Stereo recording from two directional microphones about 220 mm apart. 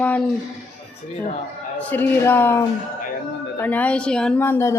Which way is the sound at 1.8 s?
5° left (ahead or behind).